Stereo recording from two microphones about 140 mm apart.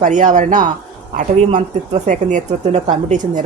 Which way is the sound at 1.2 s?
55° right (ahead or behind).